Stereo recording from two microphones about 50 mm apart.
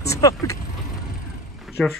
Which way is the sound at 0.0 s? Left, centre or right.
Left.